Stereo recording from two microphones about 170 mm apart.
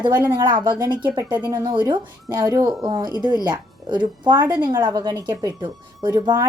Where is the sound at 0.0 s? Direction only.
25° right (ahead or behind).